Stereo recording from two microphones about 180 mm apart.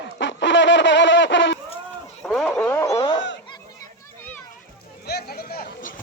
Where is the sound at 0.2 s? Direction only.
90° left.